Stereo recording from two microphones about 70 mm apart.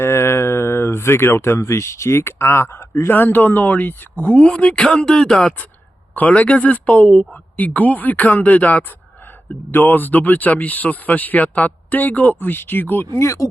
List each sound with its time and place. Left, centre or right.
0.0 s speech: left
13.1 s speech: left